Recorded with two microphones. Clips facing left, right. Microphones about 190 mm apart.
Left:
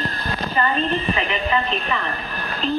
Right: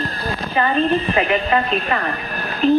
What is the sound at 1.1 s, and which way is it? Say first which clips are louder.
Speech: right 5 dB; 50° right (ahead or behind).